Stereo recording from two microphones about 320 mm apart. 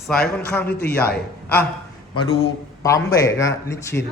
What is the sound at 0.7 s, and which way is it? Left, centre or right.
Speech, left.